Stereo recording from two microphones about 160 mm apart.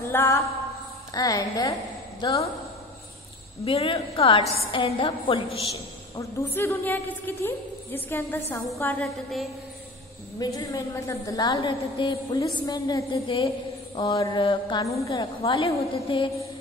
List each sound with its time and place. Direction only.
0.1 s a sound: 15° left (ahead or behind)
1.1 s a woman's voice: 20° left (ahead or behind)
3.6 s a woman's voice: 35° left (ahead or behind)
6.1 s a woman's voice: 15° left (ahead or behind)
9.0 s music: centre (ahead or behind)
10.4 s a woman's voice: 20° left (ahead or behind)